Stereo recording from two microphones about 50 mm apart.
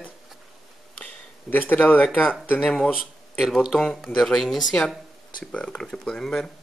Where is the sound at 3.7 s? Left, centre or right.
Centre.